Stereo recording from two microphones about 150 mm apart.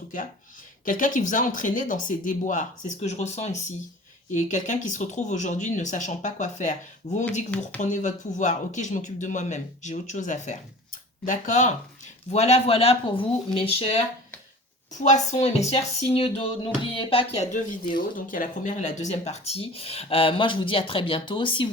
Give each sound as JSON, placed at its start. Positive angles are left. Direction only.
{"t": 0.9, "sound": "speech", "side_deg": 60}
{"t": 15.0, "sound": "speech", "side_deg": 50}